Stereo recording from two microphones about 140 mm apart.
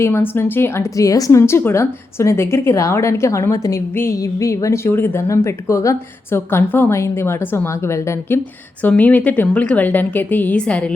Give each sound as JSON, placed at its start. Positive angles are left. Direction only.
{"t": 0.0, "sound": "a woman's voice", "side_deg": 15}